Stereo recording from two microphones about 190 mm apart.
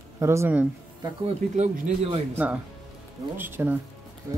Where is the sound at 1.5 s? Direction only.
40° right (ahead or behind).